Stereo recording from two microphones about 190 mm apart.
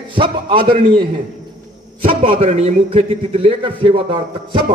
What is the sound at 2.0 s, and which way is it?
A man's voice, 30° right (ahead or behind).